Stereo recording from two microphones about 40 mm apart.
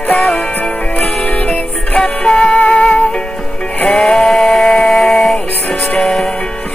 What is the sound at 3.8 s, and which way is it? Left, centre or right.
Music, centre.